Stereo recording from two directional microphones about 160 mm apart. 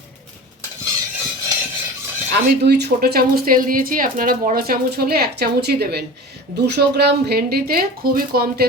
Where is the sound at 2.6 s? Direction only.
90° right.